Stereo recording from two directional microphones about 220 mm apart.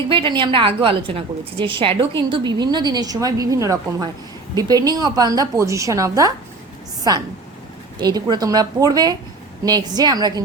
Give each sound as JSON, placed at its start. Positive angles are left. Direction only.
{"t": 0.1, "sound": "a woman's voice", "side_deg": -20}